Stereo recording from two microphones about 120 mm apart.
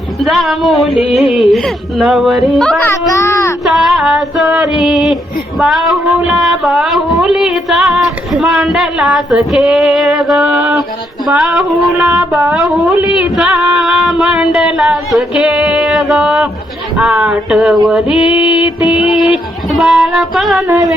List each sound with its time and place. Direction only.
0.2 s music: centre (ahead or behind)
3.1 s a sound: 25° left (ahead or behind)
3.6 s female singing: centre (ahead or behind)
5.5 s music: centre (ahead or behind)
13.1 s a sound: 5° right (ahead or behind)
17.0 s music: 10° right (ahead or behind)